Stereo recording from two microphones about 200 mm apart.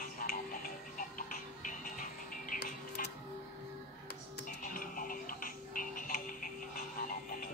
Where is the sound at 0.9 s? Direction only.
40° left (ahead or behind).